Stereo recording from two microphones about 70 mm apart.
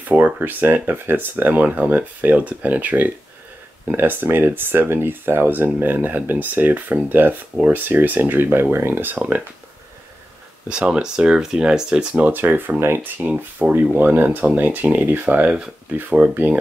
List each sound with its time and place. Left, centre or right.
0.1 s speech: right
10.7 s speech: centre